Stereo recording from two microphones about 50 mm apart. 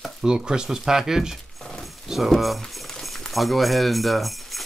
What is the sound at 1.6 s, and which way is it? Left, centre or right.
Dog, centre.